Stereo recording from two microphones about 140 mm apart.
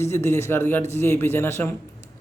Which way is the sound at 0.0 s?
20° left (ahead or behind).